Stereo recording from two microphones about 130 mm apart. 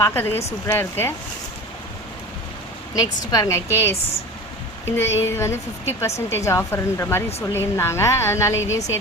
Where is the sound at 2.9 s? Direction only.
30° left (ahead or behind).